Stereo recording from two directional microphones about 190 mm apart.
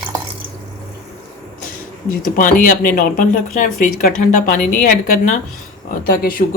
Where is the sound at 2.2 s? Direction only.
45° left (ahead or behind).